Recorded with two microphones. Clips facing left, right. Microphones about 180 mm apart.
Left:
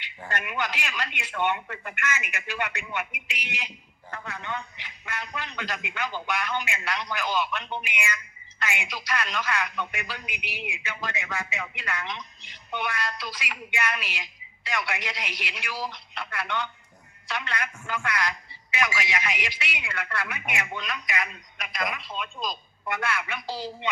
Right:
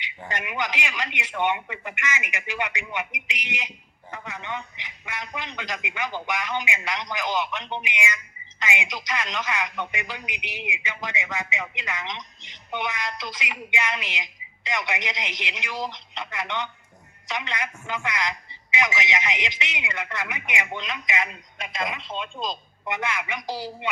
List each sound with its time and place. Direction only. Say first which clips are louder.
0.0 s a man's voice: right 1 dB; 15° right (ahead or behind)